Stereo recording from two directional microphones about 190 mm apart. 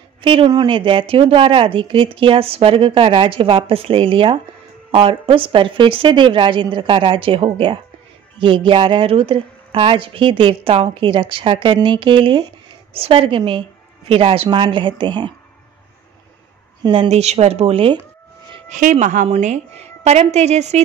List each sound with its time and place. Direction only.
0.2 s speech: 25° right (ahead or behind)
16.8 s a woman's voice: 25° right (ahead or behind)
18.7 s a woman's voice: 40° right (ahead or behind)